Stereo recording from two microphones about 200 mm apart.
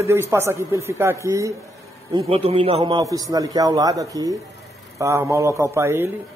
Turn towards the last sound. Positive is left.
turn(degrees=-10)  # may be behind; listen again after turning